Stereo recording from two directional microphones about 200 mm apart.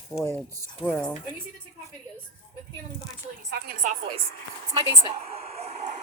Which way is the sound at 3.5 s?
45° right (ahead or behind).